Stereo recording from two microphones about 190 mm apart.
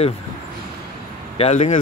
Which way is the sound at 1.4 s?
35° left (ahead or behind).